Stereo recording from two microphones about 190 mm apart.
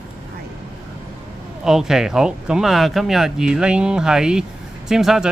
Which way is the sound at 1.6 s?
Centre (ahead or behind).